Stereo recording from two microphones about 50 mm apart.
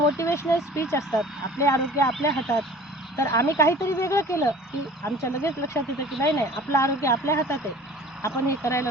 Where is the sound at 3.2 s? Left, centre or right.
Left.